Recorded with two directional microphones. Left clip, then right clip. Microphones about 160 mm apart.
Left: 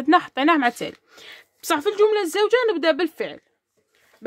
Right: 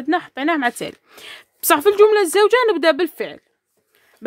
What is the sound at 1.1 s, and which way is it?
Speech, 35° right (ahead or behind).